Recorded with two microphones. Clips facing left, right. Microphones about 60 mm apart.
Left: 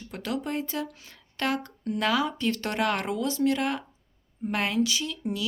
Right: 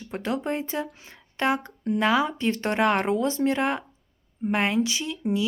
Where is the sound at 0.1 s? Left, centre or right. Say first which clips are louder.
Right 3 dB; right.